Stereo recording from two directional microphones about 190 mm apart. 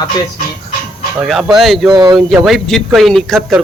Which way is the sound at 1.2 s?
Centre (ahead or behind).